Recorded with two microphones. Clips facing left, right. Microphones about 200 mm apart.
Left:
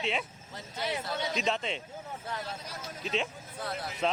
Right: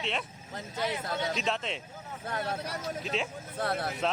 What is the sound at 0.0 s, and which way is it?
Speech, centre (ahead or behind).